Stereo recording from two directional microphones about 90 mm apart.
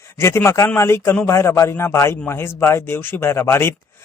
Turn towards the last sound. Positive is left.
turn(degrees=25)  # may be behind; listen again after turning